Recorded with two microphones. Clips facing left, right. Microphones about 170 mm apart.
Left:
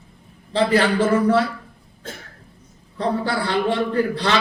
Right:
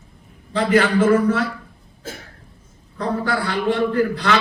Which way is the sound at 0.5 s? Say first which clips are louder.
Right 1 dB; 30° left (ahead or behind).